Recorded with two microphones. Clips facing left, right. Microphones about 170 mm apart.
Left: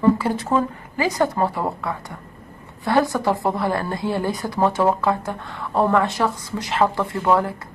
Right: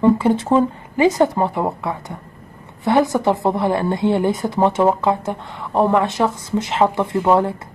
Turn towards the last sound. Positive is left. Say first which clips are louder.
# right 3 dB
turn(degrees=-25)  # may be behind; listen again after turning